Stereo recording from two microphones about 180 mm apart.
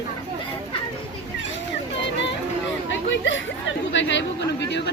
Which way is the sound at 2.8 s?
90° left.